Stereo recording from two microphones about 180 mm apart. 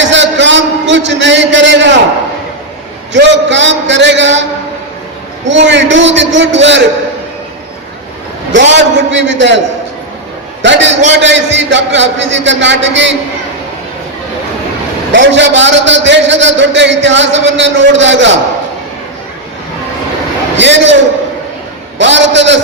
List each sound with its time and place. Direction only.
0.0 s a sound: 90° right
3.1 s a man's voice: 80° right
5.5 s a man's voice: 85° right
8.5 s a man's voice: 85° right
10.6 s a man's voice: 85° right
15.1 s a man's voice: 90° right
20.6 s a man's voice: 90° right
21.9 s a man's voice: 90° right